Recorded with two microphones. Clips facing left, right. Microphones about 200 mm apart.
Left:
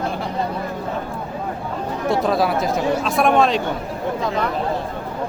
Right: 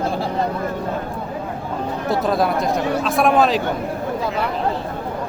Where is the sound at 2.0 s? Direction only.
Centre (ahead or behind).